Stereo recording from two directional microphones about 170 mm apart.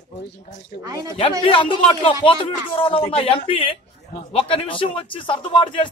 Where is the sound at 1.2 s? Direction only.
30° left (ahead or behind).